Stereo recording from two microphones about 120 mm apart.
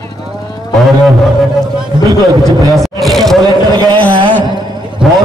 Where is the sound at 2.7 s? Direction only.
Centre (ahead or behind).